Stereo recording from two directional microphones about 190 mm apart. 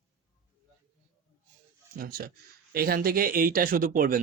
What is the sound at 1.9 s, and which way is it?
A man's voice, 50° right (ahead or behind).